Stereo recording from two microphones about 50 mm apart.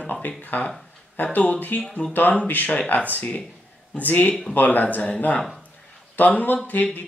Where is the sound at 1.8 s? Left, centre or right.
Centre.